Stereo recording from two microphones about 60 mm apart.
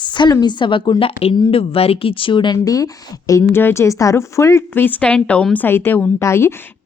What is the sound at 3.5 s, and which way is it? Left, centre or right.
A woman's voice, left.